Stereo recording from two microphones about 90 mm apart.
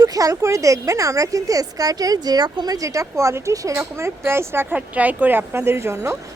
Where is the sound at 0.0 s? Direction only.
40° right (ahead or behind).